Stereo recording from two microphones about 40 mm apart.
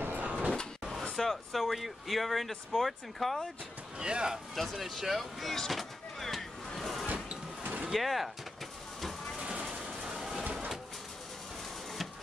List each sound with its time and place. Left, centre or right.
0.2 s sliding door: right
1.1 s speech: centre
4.0 s speech: right
4.6 s a sound: centre
7.9 s speech: centre
9.4 s vehicle: right
10.1 s a sound: centre